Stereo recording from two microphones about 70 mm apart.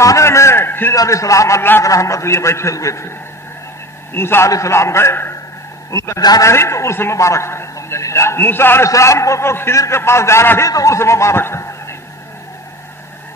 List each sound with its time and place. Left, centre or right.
0.0 s a sound: left
0.9 s a man's voice: left
1.6 s a man's voice: left
1.9 s a man's voice: left
5.9 s a man's voice: left
8.9 s a man's voice: left
10.7 s a man's voice: left